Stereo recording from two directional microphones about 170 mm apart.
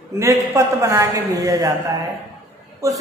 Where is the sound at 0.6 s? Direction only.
20° right (ahead or behind).